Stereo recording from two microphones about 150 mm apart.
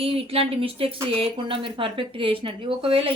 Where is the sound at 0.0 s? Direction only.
40° right (ahead or behind).